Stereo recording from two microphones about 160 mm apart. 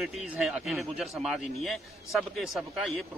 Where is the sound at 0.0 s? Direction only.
Centre (ahead or behind).